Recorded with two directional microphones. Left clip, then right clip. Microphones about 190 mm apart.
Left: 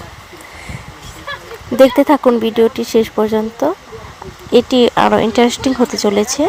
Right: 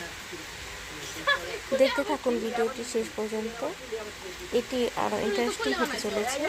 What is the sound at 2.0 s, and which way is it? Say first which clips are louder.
Speech: left 16 dB; 45° left (ahead or behind).